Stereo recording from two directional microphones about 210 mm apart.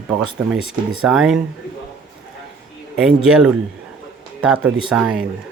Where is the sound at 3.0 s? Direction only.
5° right (ahead or behind).